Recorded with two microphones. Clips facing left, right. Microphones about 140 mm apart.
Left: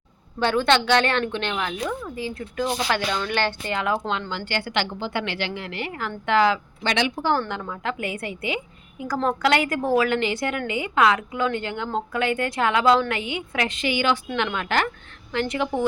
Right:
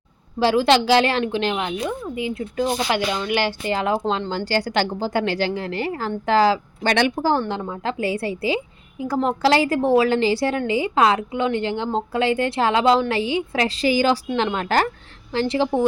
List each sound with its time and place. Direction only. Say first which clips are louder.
0.3 s a woman's voice: right 4 dB; 30° right (ahead or behind)
3.1 s a woman's voice: right 2 dB; 10° right (ahead or behind)
3.7 s a woman's voice: right 4 dB; 30° right (ahead or behind)